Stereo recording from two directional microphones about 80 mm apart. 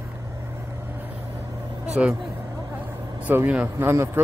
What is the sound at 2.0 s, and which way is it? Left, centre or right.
Speech, centre.